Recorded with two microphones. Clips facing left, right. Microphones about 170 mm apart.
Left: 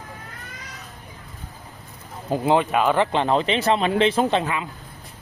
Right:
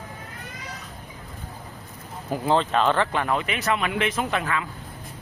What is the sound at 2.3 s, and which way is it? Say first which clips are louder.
Speech: left 3 dB; 15° left (ahead or behind).